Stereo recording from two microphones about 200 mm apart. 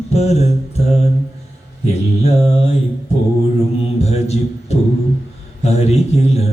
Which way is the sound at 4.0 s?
30° left (ahead or behind).